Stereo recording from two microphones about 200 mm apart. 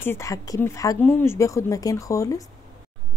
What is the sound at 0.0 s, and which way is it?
Speech, 15° left (ahead or behind).